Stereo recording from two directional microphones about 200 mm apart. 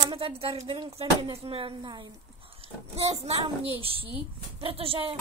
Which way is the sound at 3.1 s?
30° right (ahead or behind).